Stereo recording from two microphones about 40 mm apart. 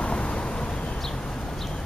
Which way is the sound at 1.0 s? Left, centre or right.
Centre.